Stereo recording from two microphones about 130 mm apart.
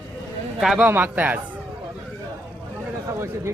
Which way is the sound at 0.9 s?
15° right (ahead or behind).